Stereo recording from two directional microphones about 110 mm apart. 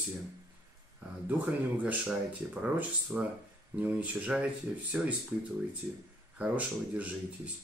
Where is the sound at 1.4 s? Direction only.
10° right (ahead or behind).